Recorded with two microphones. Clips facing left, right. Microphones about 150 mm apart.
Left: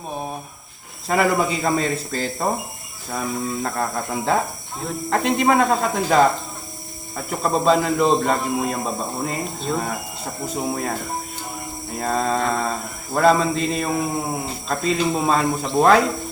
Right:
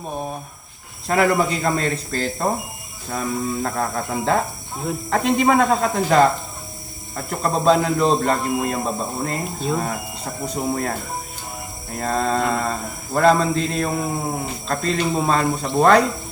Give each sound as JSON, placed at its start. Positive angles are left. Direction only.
{"t": 1.0, "sound": "speech", "side_deg": 5}